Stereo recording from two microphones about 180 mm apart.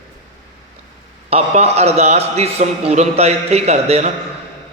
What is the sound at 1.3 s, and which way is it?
A man's voice, 35° right (ahead or behind).